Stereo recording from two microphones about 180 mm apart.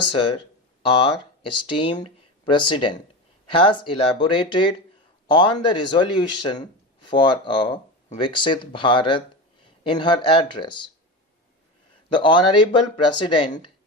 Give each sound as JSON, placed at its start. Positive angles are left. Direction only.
{"t": 0.1, "sound": "a man's voice", "side_deg": 30}
{"t": 12.0, "sound": "a man's voice", "side_deg": 25}